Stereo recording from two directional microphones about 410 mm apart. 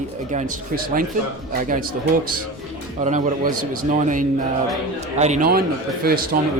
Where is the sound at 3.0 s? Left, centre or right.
Centre.